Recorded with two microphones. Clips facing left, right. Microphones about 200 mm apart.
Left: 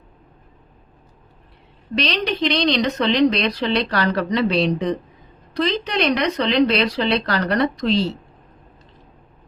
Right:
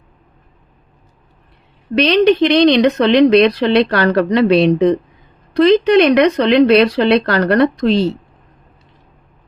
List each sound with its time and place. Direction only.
2.0 s speech: 60° right (ahead or behind)